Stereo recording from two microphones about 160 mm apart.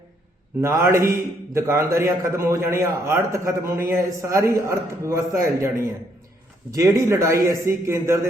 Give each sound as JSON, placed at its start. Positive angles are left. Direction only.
{"t": 0.6, "sound": "a man's voice", "side_deg": -15}